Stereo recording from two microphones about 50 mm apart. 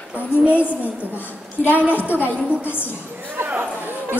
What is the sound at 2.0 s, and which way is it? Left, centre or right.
Speech, right.